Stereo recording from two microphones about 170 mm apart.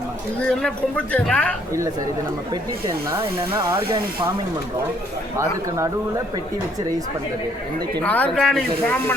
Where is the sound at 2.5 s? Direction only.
15° right (ahead or behind).